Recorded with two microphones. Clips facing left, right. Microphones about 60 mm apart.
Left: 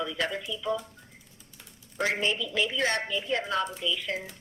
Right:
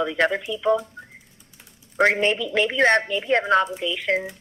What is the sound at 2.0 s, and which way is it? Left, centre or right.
Speech, right.